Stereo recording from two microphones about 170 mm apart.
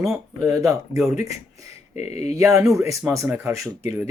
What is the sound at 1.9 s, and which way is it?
Speech, 40° left (ahead or behind).